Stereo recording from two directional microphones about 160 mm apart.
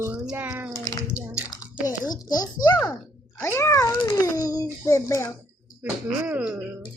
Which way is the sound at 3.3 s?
15° left (ahead or behind).